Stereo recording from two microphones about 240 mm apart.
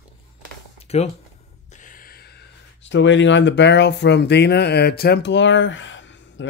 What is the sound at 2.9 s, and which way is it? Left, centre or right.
Speech, left.